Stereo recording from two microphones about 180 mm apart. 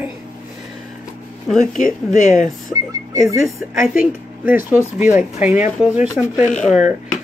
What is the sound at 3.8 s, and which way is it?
Speech, 5° right (ahead or behind).